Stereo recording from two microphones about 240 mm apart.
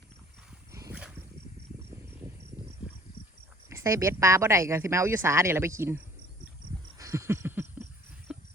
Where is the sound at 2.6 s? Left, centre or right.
Centre.